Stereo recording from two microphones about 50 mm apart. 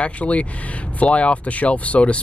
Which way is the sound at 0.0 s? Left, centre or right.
Left.